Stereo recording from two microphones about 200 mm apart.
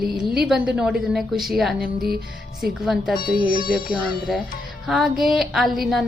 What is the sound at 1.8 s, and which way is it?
Music, 50° right (ahead or behind).